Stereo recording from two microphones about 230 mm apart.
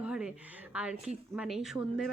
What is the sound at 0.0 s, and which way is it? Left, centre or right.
Speech, centre.